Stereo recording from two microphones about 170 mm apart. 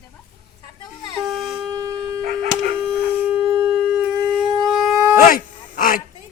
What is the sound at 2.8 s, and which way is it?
Shofar, 35° right (ahead or behind).